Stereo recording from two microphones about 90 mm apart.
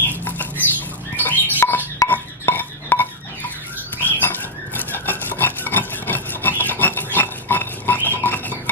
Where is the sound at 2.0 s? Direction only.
20° left (ahead or behind).